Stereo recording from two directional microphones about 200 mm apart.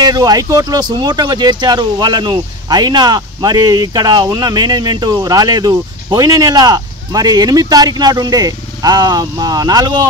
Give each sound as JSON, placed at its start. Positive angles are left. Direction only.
{"t": 0.0, "sound": "speech", "side_deg": -20}